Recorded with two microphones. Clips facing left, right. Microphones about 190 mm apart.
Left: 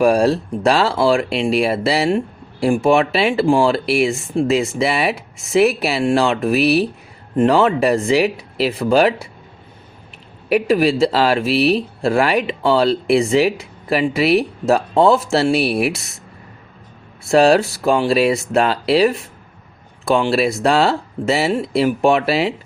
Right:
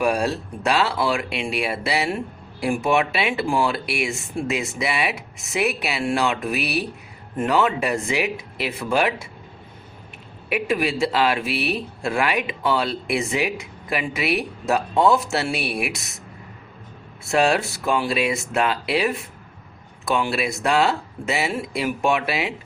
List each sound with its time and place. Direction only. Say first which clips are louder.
0.0 s speech: left 8 dB; 35° left (ahead or behind)
10.5 s speech: left 8 dB; 35° left (ahead or behind)
17.2 s speech: left 7 dB; 35° left (ahead or behind)